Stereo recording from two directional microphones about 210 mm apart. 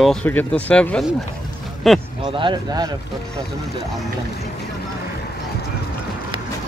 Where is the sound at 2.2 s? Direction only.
20° right (ahead or behind).